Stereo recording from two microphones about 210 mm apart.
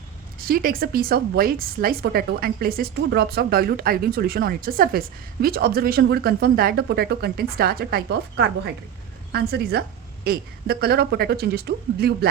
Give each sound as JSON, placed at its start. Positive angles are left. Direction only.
{"t": 0.3, "sound": "a woman's voice", "side_deg": -45}